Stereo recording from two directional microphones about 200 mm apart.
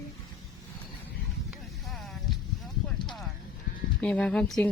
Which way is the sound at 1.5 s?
Centre (ahead or behind).